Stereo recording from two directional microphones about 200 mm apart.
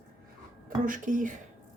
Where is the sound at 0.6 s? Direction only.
40° right (ahead or behind).